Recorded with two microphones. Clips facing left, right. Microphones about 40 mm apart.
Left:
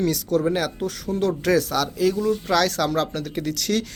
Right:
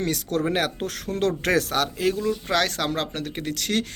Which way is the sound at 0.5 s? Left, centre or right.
Right.